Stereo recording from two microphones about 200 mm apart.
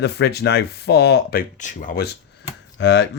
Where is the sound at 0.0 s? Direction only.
55° left (ahead or behind).